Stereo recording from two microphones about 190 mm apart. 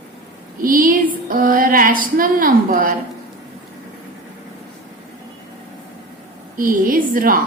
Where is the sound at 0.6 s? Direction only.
45° right (ahead or behind).